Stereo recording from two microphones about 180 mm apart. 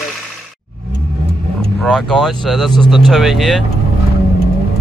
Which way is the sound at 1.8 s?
5° left (ahead or behind).